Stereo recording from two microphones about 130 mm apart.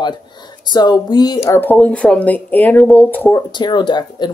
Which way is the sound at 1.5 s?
15° left (ahead or behind).